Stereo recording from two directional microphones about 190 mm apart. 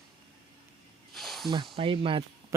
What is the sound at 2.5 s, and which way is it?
Speech, 15° right (ahead or behind).